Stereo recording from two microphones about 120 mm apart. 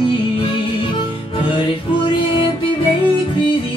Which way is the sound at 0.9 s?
45° left (ahead or behind).